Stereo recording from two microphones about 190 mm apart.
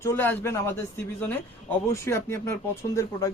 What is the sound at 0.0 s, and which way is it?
Speech, 15° left (ahead or behind).